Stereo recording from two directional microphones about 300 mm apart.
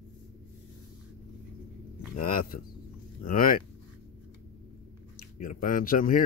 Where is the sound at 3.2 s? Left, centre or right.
Left.